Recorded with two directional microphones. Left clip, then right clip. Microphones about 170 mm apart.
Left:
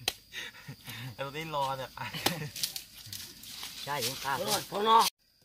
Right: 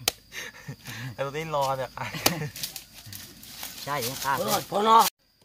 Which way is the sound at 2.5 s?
55° right (ahead or behind).